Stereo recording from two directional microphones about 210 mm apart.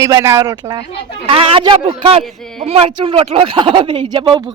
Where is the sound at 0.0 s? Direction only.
15° right (ahead or behind).